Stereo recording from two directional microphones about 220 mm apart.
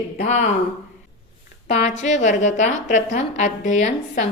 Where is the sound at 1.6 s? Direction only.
30° left (ahead or behind).